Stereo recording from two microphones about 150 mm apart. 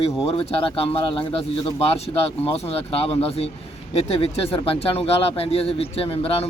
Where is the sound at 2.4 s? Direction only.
40° left (ahead or behind).